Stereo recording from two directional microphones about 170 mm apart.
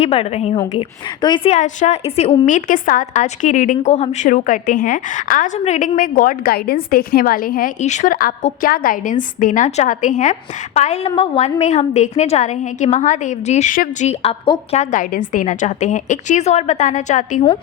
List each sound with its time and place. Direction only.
0.0 s a woman's voice: 35° left (ahead or behind)
1.5 s a woman's voice: 45° left (ahead or behind)
4.3 s a woman's voice: 50° left (ahead or behind); by 14.8 s 30° left (ahead or behind)
14.8 s a woman's voice: 50° left (ahead or behind)